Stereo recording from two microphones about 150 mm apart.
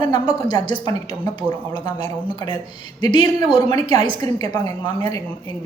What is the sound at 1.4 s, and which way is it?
A woman's voice, 30° left (ahead or behind).